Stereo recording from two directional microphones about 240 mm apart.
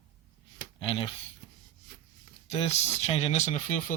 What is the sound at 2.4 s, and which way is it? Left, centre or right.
Speech, left.